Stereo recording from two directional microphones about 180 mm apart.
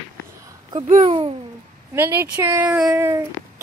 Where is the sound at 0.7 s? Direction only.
40° right (ahead or behind).